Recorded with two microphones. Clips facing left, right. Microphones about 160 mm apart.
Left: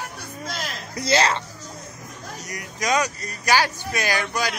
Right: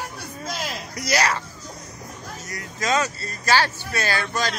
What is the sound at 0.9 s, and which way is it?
Speech, 30° left (ahead or behind).